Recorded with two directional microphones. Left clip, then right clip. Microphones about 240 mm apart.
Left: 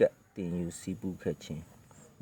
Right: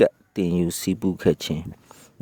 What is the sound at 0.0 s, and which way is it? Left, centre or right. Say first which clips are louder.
Speech: right 8 dB; right.